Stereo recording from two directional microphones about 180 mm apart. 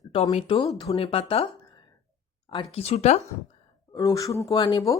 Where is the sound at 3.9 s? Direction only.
20° left (ahead or behind).